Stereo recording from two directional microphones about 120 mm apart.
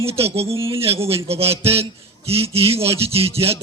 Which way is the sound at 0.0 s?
55° right (ahead or behind).